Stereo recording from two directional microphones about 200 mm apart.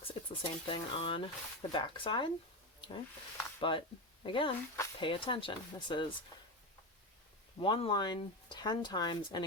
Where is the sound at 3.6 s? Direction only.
25° left (ahead or behind).